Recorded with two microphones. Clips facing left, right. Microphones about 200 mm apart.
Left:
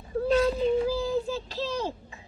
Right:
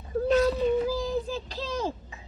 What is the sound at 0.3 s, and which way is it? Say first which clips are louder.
Child singing: even; 30° left (ahead or behind).